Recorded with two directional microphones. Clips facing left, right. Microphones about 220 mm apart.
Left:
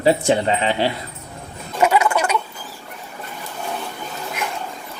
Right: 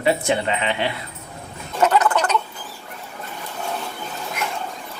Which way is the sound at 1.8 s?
10° left (ahead or behind).